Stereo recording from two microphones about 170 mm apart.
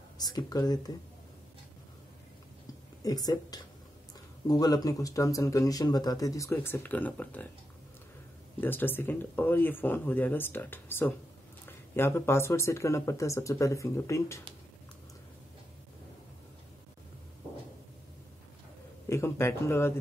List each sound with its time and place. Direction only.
0.2 s speech: 25° left (ahead or behind)
3.0 s speech: 20° left (ahead or behind)
8.5 s speech: 10° left (ahead or behind)
19.0 s speech: 15° left (ahead or behind)